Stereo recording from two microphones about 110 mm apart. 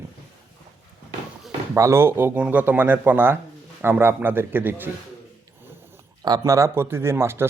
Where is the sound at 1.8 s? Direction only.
25° right (ahead or behind).